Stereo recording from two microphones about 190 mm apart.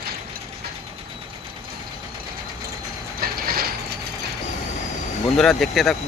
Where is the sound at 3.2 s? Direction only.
50° right (ahead or behind).